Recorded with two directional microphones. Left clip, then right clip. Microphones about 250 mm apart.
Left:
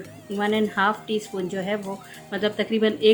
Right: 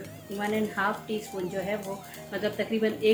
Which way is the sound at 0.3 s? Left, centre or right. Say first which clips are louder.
Left 6 dB; left.